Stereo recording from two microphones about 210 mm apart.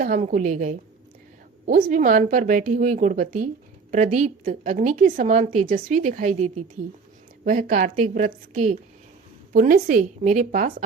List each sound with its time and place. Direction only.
0.0 s speech: 40° right (ahead or behind)